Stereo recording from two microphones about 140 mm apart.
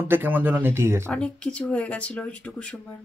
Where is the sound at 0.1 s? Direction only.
15° right (ahead or behind).